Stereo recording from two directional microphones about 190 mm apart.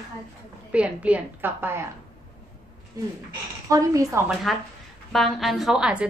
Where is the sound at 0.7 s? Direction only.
5° right (ahead or behind).